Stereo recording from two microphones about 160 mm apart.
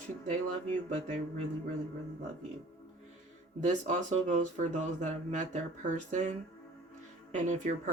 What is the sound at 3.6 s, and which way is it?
Speech, 50° right (ahead or behind).